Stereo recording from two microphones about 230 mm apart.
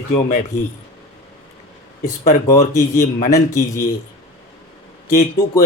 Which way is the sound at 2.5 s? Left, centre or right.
Centre.